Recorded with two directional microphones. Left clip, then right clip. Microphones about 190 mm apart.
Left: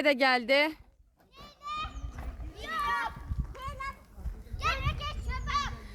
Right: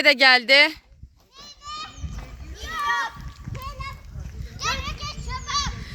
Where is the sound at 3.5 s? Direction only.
Centre (ahead or behind).